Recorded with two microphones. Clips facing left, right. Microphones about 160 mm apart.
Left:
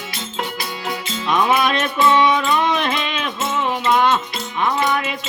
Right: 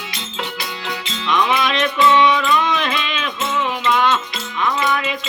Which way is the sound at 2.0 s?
45° left (ahead or behind).